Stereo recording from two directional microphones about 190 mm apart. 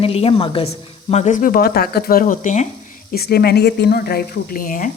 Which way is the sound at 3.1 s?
55° left (ahead or behind).